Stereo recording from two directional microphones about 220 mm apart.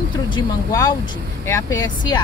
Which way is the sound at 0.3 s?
20° left (ahead or behind).